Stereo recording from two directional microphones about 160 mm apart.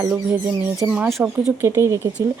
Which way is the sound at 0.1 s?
10° right (ahead or behind).